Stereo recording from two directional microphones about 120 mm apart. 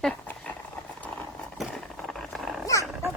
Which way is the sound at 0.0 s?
10° left (ahead or behind).